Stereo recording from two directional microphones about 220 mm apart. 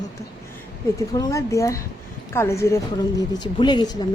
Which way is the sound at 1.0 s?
15° left (ahead or behind).